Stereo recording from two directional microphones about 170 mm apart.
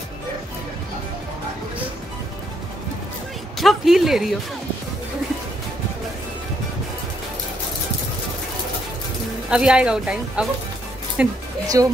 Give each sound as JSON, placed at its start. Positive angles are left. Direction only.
{"t": 3.5, "sound": "speech", "side_deg": 0}
{"t": 9.5, "sound": "speech", "side_deg": -5}
{"t": 11.6, "sound": "speech", "side_deg": -20}